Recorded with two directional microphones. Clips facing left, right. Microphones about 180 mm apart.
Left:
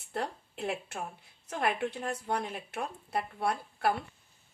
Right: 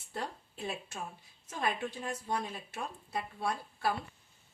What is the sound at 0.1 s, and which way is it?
Speech, 65° left (ahead or behind).